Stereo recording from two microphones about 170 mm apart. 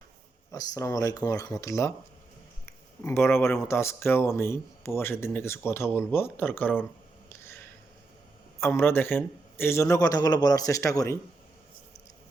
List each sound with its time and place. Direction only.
0.5 s speech: 20° left (ahead or behind)
3.0 s speech: 15° left (ahead or behind)
7.3 s a sound: 15° left (ahead or behind)
8.6 s speech: 15° left (ahead or behind)